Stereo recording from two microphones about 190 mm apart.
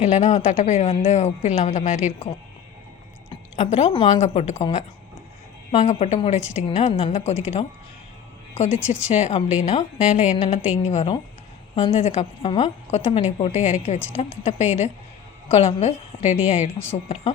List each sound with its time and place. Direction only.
0.0 s a woman's voice: 35° left (ahead or behind)
3.2 s a woman's voice: 35° left (ahead or behind)
8.5 s a woman's voice: 35° left (ahead or behind)
16.7 s speech: 10° left (ahead or behind)